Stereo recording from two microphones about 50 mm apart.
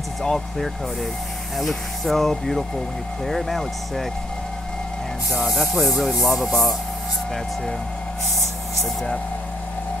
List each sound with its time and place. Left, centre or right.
0.2 s speech: centre
1.6 s music: centre
5.3 s music: centre